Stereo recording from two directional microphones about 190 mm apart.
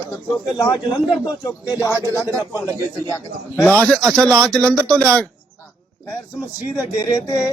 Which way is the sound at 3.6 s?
5° left (ahead or behind).